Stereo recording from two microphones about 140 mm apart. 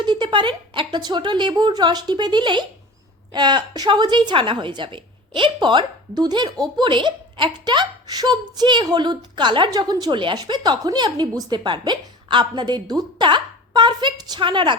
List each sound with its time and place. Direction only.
0.0 s a woman's voice: 35° right (ahead or behind)